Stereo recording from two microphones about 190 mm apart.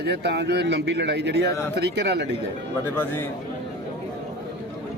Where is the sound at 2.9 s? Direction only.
10° left (ahead or behind).